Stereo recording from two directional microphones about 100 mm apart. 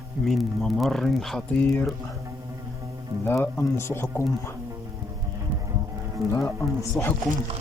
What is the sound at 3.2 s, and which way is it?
Speech, 25° left (ahead or behind).